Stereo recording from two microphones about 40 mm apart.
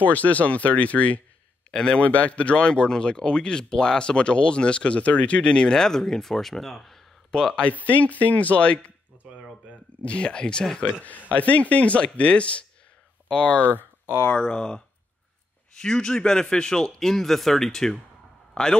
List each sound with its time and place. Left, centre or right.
0.0 s speech: left
1.7 s speech: left
2.0 s speech: left; by 7.0 s centre
7.2 s speech: centre
7.5 s speech: left
10.9 s a man's voice: left
13.7 s a sound: right
14.5 s a man's voice: left